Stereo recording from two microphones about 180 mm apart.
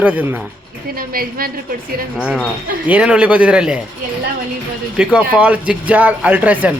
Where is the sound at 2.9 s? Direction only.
5° right (ahead or behind).